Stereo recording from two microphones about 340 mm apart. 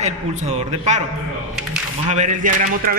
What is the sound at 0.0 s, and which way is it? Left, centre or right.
A man's voice, centre.